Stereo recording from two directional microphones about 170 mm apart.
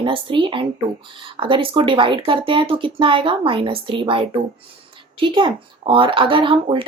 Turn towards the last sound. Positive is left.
turn(degrees=-30)  # may be behind; listen again after turning